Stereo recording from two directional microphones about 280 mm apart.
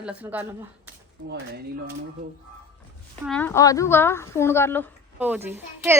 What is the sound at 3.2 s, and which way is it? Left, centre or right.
A woman's voice, centre.